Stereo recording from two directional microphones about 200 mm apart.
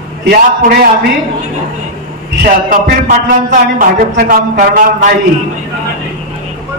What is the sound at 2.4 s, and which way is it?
A man's voice, 40° right (ahead or behind).